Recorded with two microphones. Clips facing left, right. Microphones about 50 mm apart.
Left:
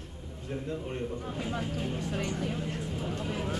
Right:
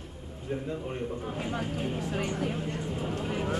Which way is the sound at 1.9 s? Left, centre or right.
Right.